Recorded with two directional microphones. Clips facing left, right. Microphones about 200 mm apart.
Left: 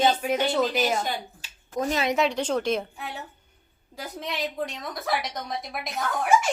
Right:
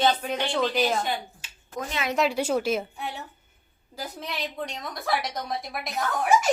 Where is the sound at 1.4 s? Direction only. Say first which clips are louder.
Left 6 dB; 35° left (ahead or behind).